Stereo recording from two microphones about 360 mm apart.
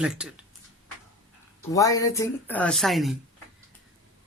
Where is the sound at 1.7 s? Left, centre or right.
Centre.